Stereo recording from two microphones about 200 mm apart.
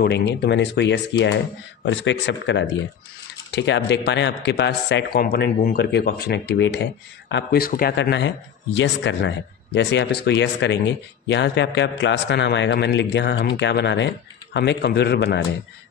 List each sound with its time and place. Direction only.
0.0 s speech: 55° left (ahead or behind)